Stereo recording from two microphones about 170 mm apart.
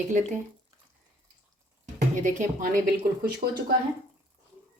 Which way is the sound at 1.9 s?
50° right (ahead or behind).